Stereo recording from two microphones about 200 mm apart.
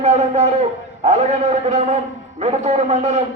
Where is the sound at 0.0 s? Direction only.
35° right (ahead or behind).